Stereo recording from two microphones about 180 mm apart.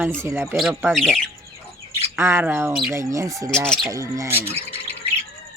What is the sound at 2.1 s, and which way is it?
Speech, 15° right (ahead or behind).